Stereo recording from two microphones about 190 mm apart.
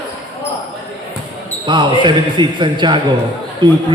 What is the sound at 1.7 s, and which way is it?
Speech, 25° right (ahead or behind).